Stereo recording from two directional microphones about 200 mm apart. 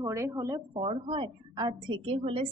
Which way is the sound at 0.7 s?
25° right (ahead or behind).